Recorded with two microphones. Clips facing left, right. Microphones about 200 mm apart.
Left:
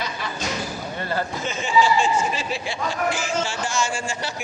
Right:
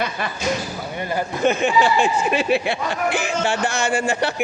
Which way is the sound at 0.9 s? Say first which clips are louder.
Right 2 dB; 15° right (ahead or behind).